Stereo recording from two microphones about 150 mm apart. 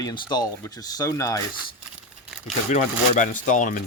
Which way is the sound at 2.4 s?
50° left (ahead or behind).